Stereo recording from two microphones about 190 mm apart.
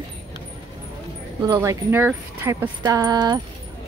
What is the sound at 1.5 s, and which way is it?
Speech, 10° right (ahead or behind).